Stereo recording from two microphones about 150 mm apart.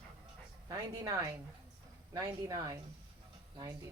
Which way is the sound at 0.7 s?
25° right (ahead or behind).